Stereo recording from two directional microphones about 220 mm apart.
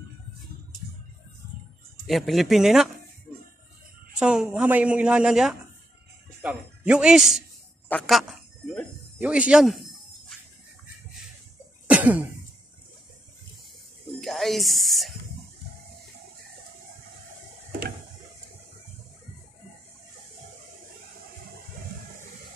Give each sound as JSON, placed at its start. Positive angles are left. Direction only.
{"t": 2.0, "sound": "a woman's voice", "side_deg": 0}
{"t": 4.2, "sound": "a woman's voice", "side_deg": -5}
{"t": 7.9, "sound": "a sound", "side_deg": 0}
{"t": 10.3, "sound": "music", "side_deg": 0}
{"t": 11.9, "sound": "cough", "side_deg": -5}
{"t": 14.2, "sound": "speech", "side_deg": 0}